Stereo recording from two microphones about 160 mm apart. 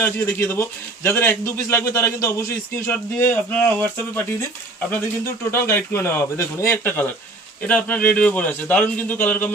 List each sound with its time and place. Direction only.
0.0 s a man's voice: 15° left (ahead or behind)